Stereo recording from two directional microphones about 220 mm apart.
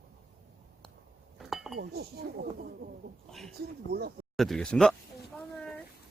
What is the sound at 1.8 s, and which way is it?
Speech, 45° right (ahead or behind).